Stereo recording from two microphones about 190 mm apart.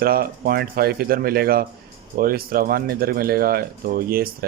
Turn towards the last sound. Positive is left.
turn(degrees=-50)  # may be behind; listen again after turning